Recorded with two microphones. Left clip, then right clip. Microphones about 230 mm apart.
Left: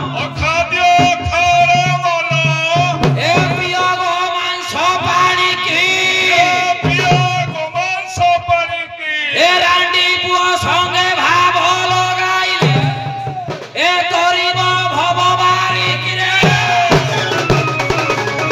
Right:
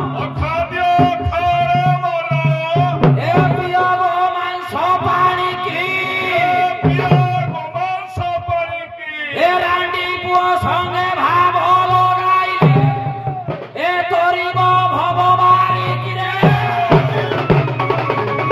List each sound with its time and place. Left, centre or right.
0.5 s music: centre
13.7 s music: right